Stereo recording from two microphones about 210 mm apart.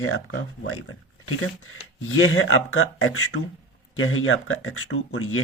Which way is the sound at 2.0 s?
75° left (ahead or behind).